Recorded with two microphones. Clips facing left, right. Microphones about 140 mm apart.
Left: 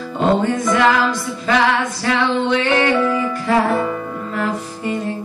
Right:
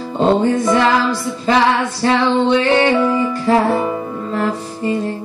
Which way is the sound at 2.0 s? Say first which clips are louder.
Right 4 dB; 30° right (ahead or behind).